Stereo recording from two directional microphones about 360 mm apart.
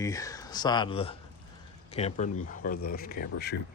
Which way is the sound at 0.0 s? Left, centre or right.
Centre.